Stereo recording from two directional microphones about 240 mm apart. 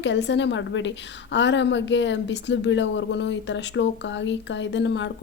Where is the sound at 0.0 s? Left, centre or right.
Left.